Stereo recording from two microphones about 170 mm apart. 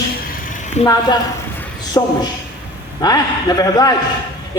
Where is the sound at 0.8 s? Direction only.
25° left (ahead or behind).